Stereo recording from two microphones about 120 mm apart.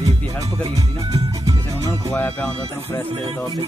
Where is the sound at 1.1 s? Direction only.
30° right (ahead or behind).